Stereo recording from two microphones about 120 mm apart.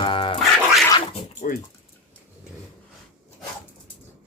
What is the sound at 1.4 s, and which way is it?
Speech, 80° left.